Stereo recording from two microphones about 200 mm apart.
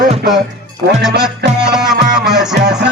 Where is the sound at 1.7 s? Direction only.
5° right (ahead or behind).